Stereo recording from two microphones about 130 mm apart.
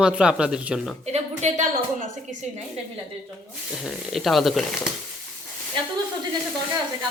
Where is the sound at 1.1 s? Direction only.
60° right (ahead or behind).